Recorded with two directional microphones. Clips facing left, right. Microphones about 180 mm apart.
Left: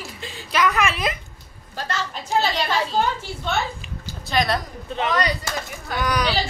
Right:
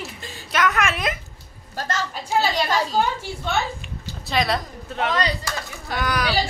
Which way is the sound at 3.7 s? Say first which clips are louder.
Even; centre (ahead or behind).